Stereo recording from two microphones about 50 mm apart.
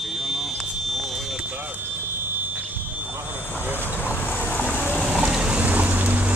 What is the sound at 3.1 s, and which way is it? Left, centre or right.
Vehicle, right.